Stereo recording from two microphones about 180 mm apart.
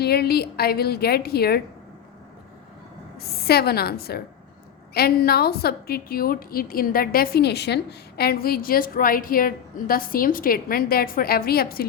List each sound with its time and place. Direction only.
0.0 s a woman's voice: 60° left (ahead or behind)
3.2 s a woman's voice: 60° left (ahead or behind)